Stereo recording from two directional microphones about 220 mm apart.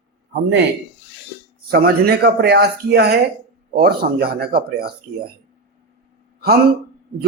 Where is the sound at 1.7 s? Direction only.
45° right (ahead or behind).